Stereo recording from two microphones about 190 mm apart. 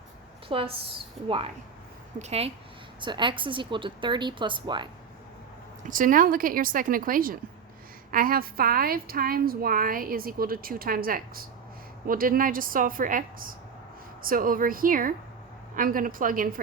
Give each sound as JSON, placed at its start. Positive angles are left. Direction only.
{"t": 0.4, "sound": "a woman's voice", "side_deg": -30}
{"t": 3.0, "sound": "a woman's voice", "side_deg": -25}
{"t": 5.8, "sound": "a woman's voice", "side_deg": -45}